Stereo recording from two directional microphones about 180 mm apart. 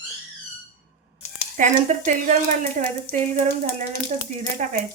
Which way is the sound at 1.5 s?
45° right (ahead or behind).